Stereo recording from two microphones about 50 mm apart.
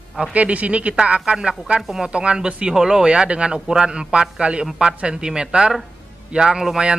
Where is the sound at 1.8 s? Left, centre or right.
Centre.